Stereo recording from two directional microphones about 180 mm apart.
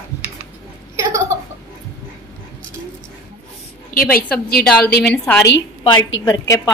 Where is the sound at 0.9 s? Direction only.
15° right (ahead or behind).